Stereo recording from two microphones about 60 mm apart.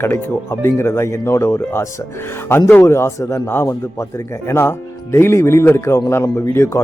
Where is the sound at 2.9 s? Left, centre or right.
Left.